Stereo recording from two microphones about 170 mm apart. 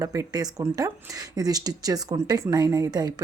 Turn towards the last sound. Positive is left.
turn(degrees=-25)  # may be behind; listen again after turning